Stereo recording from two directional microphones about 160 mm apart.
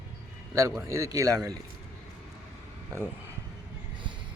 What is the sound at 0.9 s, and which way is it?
Speech, 20° right (ahead or behind).